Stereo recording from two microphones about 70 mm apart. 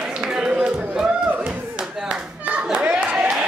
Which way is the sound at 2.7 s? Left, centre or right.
Centre.